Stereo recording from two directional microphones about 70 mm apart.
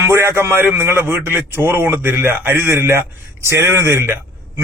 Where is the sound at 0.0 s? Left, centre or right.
Right.